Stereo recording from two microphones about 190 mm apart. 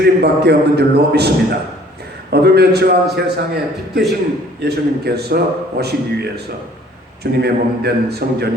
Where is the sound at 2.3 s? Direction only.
60° right (ahead or behind).